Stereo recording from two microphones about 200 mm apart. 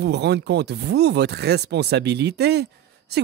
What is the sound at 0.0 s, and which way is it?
Speech, 55° right (ahead or behind).